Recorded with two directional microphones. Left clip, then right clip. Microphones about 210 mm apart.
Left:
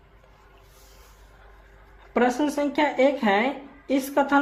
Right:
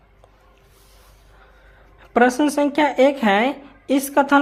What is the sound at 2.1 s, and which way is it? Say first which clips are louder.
A woman's voice: right 6 dB; 35° right (ahead or behind).